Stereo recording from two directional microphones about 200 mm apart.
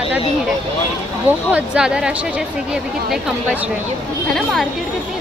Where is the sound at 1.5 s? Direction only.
5° right (ahead or behind).